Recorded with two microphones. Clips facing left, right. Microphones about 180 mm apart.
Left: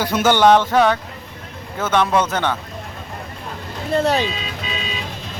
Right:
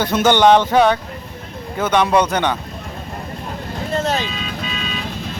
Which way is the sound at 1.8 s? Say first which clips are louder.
Right 2 dB; 15° right (ahead or behind).